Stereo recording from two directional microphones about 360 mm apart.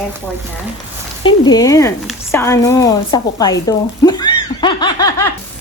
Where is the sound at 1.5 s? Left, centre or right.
Centre.